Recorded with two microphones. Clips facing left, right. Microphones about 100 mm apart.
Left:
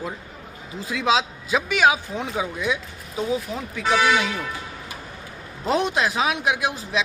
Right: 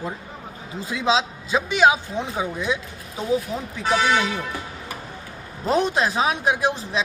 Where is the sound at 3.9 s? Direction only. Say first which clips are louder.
Even; 30° right (ahead or behind).